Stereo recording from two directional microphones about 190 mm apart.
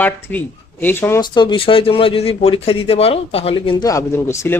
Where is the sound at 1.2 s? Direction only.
25° left (ahead or behind).